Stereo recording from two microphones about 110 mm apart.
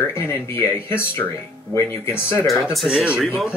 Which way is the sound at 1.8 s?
20° left (ahead or behind).